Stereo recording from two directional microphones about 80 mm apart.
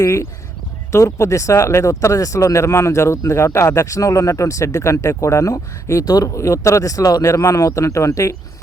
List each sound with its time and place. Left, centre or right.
0.9 s speech: left